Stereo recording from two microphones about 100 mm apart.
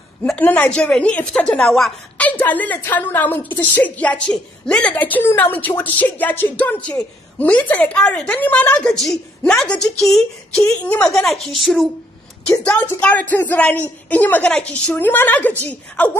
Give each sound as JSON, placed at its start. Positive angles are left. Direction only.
{"t": 0.4, "sound": "a woman's voice", "side_deg": 15}
{"t": 2.1, "sound": "a woman's voice", "side_deg": 15}
{"t": 10.6, "sound": "a woman's voice", "side_deg": 15}
{"t": 11.1, "sound": "a woman's voice", "side_deg": 5}
{"t": 12.4, "sound": "a woman's voice", "side_deg": 15}